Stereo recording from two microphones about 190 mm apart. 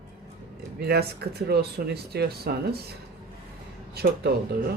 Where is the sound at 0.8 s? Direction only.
55° right (ahead or behind).